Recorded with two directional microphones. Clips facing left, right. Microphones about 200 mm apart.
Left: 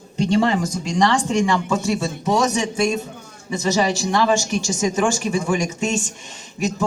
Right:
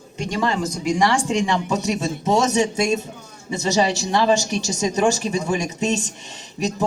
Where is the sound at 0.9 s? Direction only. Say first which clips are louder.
Even; 10° right (ahead or behind).